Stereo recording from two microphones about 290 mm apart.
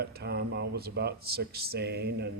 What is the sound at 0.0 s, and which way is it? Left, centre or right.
Speech, right.